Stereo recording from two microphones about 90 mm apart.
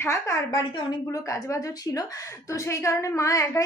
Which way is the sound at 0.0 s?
30° left (ahead or behind).